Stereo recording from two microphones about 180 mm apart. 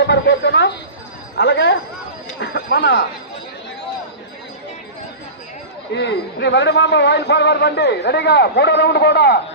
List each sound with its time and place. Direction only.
0.0 s a man's voice: 75° left (ahead or behind)
2.4 s a man's voice: 60° left (ahead or behind)
5.9 s a man's voice: 75° left (ahead or behind)